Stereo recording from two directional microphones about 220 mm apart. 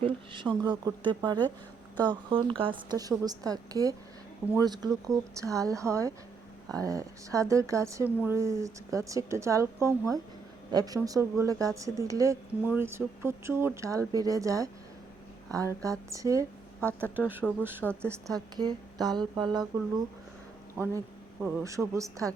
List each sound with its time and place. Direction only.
0.0 s speech: 20° right (ahead or behind)
20.7 s speech: 10° right (ahead or behind)